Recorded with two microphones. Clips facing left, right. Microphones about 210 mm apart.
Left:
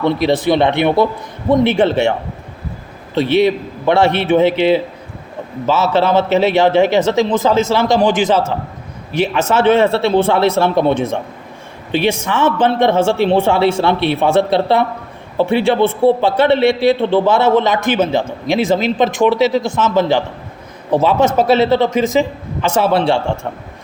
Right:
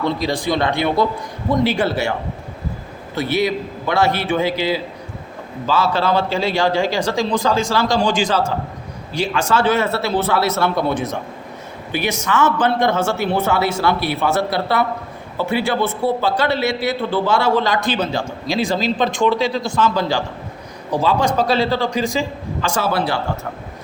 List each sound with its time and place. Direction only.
0.4 s a man's voice: 20° left (ahead or behind)
3.2 s a man's voice: 25° left (ahead or behind)